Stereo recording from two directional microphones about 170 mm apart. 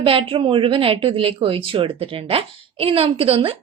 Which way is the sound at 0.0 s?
30° right (ahead or behind).